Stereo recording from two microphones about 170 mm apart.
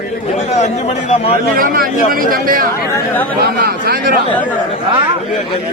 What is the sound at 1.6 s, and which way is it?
Speech, 55° right (ahead or behind).